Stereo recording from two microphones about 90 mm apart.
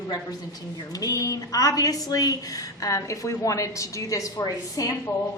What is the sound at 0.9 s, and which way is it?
A woman's voice, 40° left (ahead or behind).